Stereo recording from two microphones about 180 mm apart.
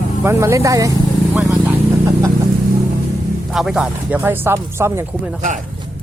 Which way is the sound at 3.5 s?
Centre (ahead or behind).